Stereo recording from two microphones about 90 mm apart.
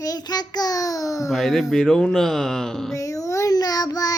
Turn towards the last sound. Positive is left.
turn(degrees=45)  # may be behind; listen again after turning